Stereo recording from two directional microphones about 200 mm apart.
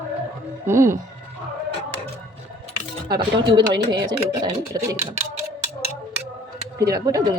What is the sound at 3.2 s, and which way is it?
Speech, 20° right (ahead or behind).